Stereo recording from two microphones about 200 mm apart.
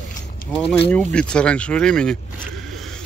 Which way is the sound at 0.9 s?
5° left (ahead or behind).